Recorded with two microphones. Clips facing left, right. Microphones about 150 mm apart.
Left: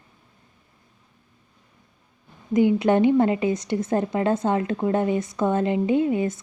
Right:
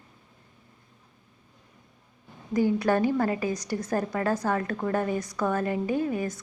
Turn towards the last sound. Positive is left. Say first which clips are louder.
# left 6 dB
turn(degrees=25)  # may be behind; listen again after turning